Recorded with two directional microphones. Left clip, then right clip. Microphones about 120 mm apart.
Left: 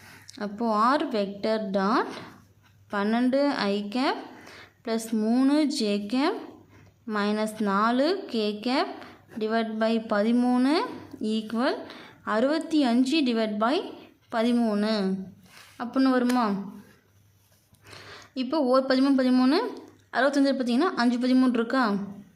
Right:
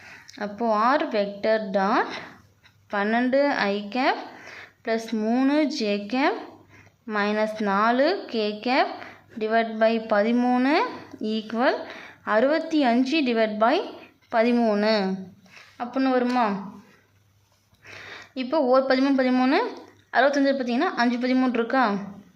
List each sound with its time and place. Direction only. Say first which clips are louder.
0.3 s a woman's voice: right 2 dB; 30° left (ahead or behind)
15.8 s speech: right 1 dB; 50° left (ahead or behind)
17.8 s speech: right 5 dB; 30° left (ahead or behind)